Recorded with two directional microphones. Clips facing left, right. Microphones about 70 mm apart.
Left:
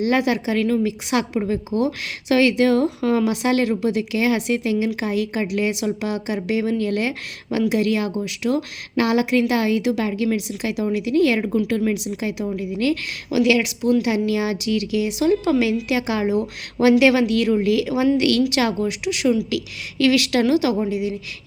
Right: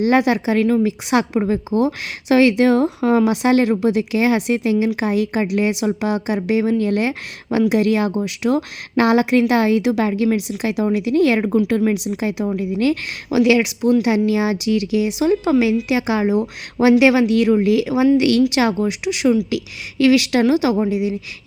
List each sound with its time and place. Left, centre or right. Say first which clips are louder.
0.0 s a woman's voice: right 4 dB; right